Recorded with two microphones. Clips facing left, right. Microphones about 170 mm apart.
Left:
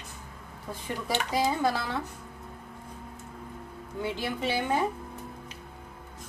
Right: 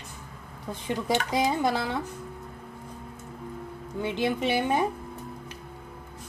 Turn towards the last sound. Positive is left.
turn(degrees=-20)  # may be behind; listen again after turning